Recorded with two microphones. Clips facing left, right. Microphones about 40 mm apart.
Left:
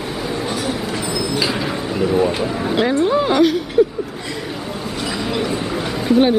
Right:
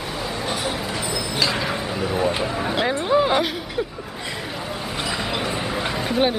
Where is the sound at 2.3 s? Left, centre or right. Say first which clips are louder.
Left 4 dB; centre.